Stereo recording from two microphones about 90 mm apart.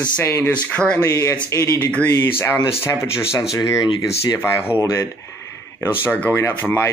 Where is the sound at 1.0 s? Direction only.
30° left (ahead or behind).